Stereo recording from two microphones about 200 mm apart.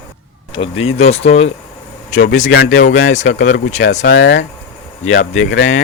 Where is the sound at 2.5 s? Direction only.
65° left (ahead or behind).